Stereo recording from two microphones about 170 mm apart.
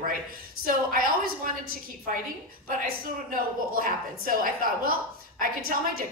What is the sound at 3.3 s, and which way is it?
A woman's voice, 55° right (ahead or behind).